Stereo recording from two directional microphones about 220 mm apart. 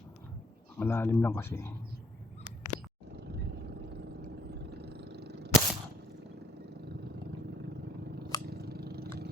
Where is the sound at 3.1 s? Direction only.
50° right (ahead or behind).